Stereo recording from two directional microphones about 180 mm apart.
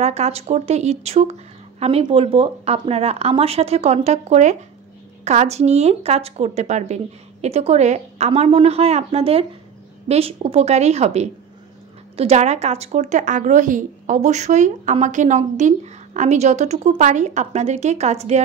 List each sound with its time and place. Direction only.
0.0 s a woman's voice: 40° right (ahead or behind)